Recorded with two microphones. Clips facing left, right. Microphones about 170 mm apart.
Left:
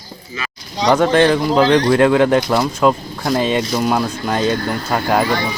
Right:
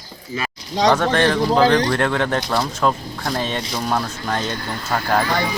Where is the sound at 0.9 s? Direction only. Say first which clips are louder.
Left 5 dB; 15° left (ahead or behind).